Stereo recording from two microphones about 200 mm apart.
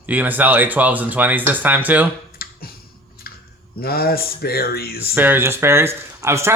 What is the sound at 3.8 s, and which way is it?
Speech, 50° left (ahead or behind).